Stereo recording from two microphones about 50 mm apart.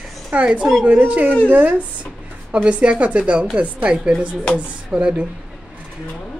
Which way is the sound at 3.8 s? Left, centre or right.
Centre.